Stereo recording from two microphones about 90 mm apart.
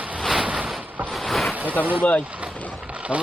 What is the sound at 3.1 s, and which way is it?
Speech, 15° right (ahead or behind).